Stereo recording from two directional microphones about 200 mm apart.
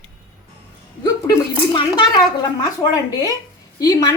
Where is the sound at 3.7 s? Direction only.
20° left (ahead or behind).